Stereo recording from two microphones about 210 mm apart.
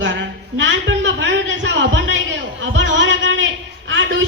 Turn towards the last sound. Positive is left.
turn(degrees=-65)  # may be behind; listen again after turning